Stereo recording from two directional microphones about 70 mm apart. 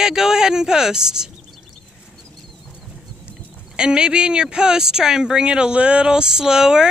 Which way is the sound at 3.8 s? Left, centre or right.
Centre.